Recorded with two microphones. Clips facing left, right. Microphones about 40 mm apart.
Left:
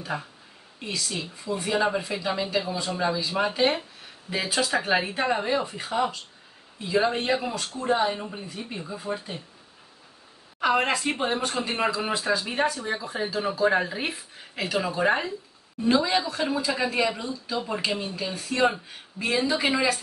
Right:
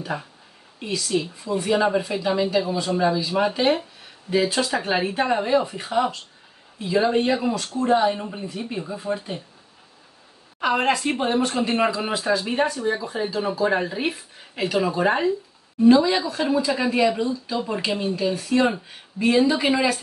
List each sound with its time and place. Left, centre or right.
0.1 s speech: centre
0.7 s speech: centre
10.6 s speech: centre
11.5 s speech: centre
12.4 s speech: centre